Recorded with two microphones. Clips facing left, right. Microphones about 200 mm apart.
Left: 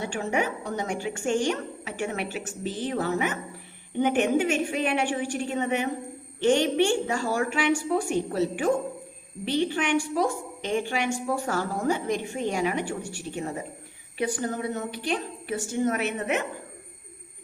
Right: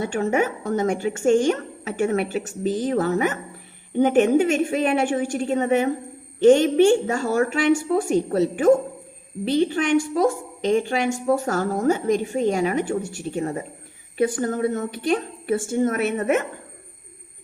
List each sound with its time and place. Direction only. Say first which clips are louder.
0.0 s speech: right 6 dB; 45° right (ahead or behind)
9.4 s a woman's voice: right 5 dB; 40° right (ahead or behind)
14.2 s speech: right 7 dB; 50° right (ahead or behind)